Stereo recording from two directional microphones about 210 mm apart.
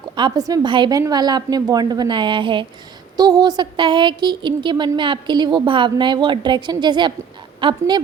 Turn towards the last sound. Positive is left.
turn(degrees=-20)  # may be behind; listen again after turning